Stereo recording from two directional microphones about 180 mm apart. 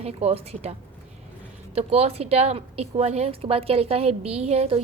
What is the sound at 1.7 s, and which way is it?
Speech, 35° right (ahead or behind).